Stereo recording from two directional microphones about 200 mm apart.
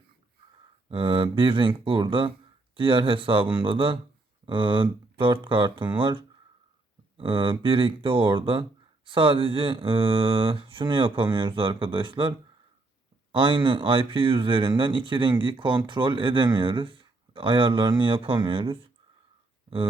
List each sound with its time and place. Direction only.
0.9 s speech: 25° right (ahead or behind)
13.3 s speech: 25° right (ahead or behind)